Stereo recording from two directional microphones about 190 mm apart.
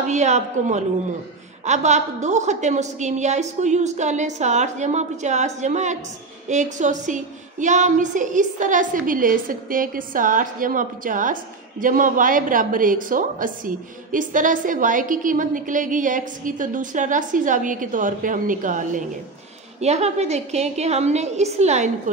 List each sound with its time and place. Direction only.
0.1 s a woman's voice: 40° right (ahead or behind)